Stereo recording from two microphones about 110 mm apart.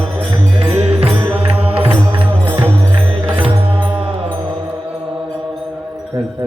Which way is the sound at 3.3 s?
55° right (ahead or behind).